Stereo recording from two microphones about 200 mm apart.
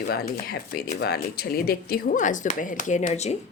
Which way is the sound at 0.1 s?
50° left (ahead or behind).